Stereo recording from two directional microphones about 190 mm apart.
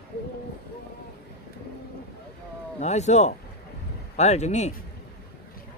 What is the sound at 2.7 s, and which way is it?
A man's voice, 35° left (ahead or behind).